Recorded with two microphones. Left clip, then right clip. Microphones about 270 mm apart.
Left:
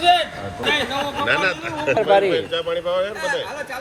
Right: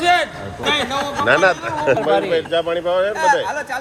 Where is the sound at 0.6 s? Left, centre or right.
Centre.